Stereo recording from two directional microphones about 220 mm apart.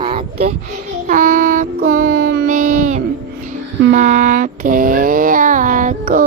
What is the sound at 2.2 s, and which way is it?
Music, 50° right (ahead or behind).